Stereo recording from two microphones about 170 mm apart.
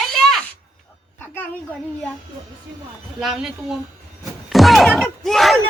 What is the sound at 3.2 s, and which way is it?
Speech, centre (ahead or behind).